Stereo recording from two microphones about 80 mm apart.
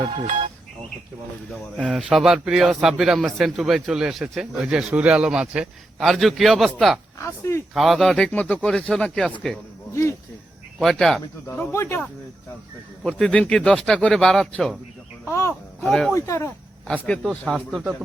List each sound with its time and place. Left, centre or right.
1.8 s a man's voice: centre
6.0 s speech: centre
7.2 s speech: left
7.7 s speech: centre
9.9 s speech: left
10.8 s speech: centre
11.4 s speech: left
13.1 s speech: centre
15.3 s speech: left
15.8 s speech: centre
16.1 s speech: left
16.8 s speech: centre
17.4 s speech: centre